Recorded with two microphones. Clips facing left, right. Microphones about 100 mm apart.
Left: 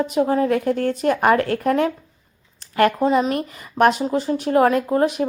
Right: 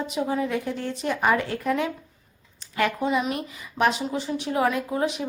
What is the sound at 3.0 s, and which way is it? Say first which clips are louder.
Speech: left 6 dB; 40° left (ahead or behind).